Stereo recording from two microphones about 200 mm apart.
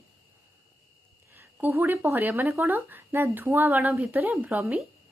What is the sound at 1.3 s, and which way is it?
Speech, 10° right (ahead or behind).